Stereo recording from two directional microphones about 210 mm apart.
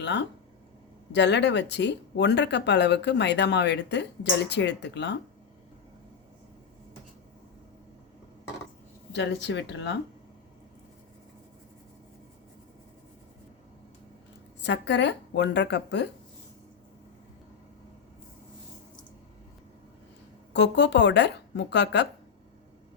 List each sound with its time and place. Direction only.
0.0 s speech: 55° left (ahead or behind)
9.1 s speech: 55° left (ahead or behind)
14.6 s speech: 55° left (ahead or behind)
20.5 s speech: 55° left (ahead or behind)